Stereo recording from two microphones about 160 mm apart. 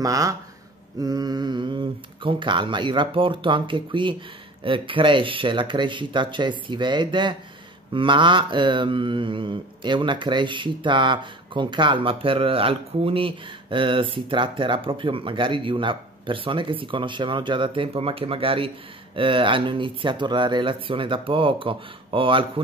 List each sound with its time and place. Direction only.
0.0 s speech: 20° right (ahead or behind)
4.6 s mantra: 30° right (ahead or behind)